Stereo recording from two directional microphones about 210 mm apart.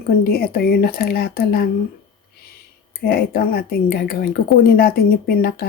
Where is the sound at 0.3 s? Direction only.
45° left (ahead or behind).